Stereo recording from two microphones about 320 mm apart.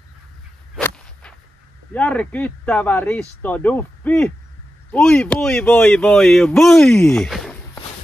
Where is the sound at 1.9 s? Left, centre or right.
Centre.